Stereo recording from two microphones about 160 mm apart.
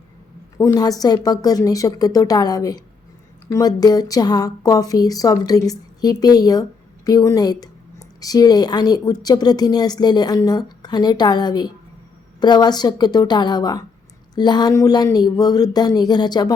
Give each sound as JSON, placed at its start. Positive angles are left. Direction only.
{"t": 0.6, "sound": "a woman's voice", "side_deg": 25}